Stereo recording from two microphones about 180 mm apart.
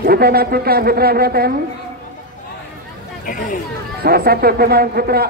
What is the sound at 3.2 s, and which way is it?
Speech, 50° left (ahead or behind).